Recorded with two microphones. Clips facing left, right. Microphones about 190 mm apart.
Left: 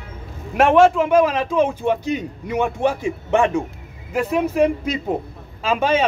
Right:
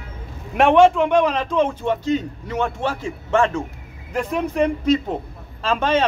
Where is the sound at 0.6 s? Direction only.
Centre (ahead or behind).